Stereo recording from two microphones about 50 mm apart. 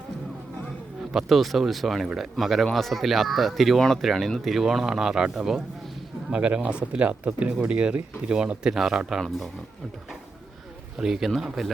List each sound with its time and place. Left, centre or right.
1.1 s speech: centre
3.8 s speech: centre
6.3 s speech: right
8.7 s speech: centre
11.0 s speech: centre